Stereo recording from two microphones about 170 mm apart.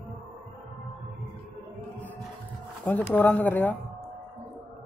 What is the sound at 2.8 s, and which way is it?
Speech, 10° left (ahead or behind).